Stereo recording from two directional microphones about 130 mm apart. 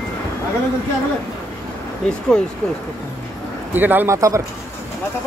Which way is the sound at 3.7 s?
15° right (ahead or behind).